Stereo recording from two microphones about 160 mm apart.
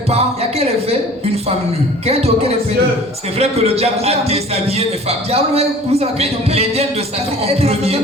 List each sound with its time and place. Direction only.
3.3 s a man's voice: 40° right (ahead or behind)